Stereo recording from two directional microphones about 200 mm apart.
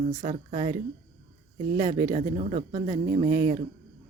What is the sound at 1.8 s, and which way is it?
A woman's voice, 40° right (ahead or behind).